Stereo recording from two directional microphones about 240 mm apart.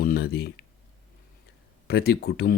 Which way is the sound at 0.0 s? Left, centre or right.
Left.